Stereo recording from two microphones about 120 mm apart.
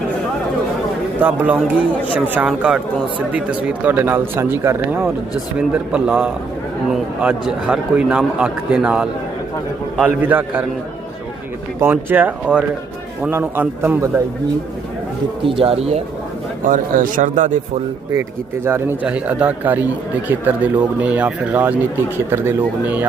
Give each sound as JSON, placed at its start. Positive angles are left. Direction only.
{"t": 1.2, "sound": "speech", "side_deg": -15}
{"t": 5.5, "sound": "speech", "side_deg": -10}
{"t": 7.4, "sound": "speech", "side_deg": -5}
{"t": 11.8, "sound": "speech", "side_deg": -15}
{"t": 15.4, "sound": "speech", "side_deg": -50}
{"t": 16.6, "sound": "speech", "side_deg": -90}
{"t": 18.2, "sound": "speech", "side_deg": -20}